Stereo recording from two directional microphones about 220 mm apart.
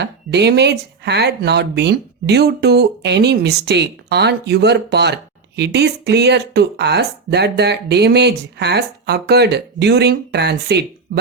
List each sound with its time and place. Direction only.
0.0 s speech: 50° right (ahead or behind)